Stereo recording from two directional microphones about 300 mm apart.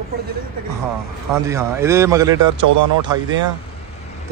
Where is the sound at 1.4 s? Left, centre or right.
Centre.